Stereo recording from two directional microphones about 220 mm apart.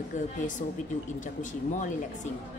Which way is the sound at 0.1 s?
35° left (ahead or behind).